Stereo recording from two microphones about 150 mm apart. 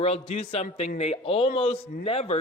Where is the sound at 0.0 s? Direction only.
45° left (ahead or behind).